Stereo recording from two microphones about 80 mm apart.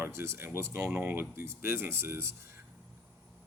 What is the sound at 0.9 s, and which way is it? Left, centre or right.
Speech, centre.